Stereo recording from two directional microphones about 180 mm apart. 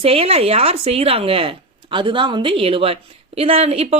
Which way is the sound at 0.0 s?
35° right (ahead or behind).